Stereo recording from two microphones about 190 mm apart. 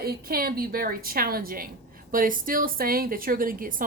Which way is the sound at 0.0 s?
55° right (ahead or behind).